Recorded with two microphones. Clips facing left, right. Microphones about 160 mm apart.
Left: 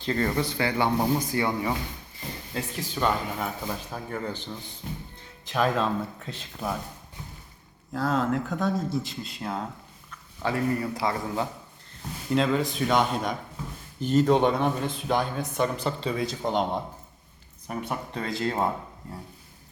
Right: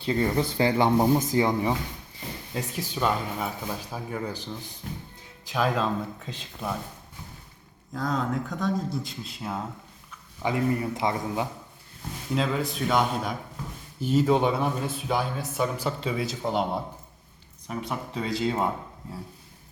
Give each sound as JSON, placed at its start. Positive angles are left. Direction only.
{"t": 0.0, "sound": "speech", "side_deg": -15}
{"t": 0.3, "sound": "speech", "side_deg": -25}
{"t": 5.5, "sound": "speech", "side_deg": 0}
{"t": 7.9, "sound": "speech", "side_deg": 5}
{"t": 10.1, "sound": "speech", "side_deg": -15}
{"t": 12.3, "sound": "speech", "side_deg": 0}